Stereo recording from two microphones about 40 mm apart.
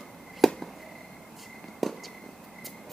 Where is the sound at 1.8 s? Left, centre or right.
Centre.